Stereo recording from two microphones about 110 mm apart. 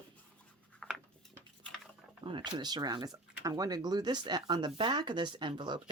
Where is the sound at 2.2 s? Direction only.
45° right (ahead or behind).